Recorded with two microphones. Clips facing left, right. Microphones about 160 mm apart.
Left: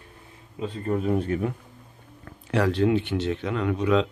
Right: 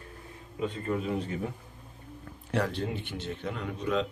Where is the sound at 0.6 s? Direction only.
40° left (ahead or behind); by 1.5 s 60° left (ahead or behind).